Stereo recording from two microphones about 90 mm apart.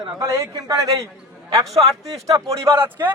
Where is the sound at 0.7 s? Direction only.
40° right (ahead or behind).